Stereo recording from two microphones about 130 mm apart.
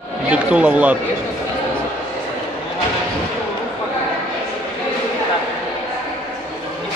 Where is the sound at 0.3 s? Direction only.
10° right (ahead or behind).